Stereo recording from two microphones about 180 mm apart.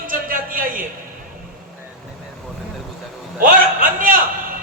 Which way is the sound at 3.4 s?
50° right (ahead or behind).